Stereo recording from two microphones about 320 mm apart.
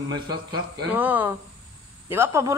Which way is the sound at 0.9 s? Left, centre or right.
Centre.